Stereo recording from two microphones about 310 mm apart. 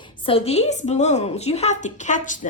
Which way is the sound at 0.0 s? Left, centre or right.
Centre.